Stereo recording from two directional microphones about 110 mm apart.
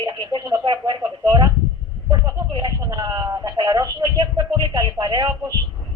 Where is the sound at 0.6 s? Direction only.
45° right (ahead or behind).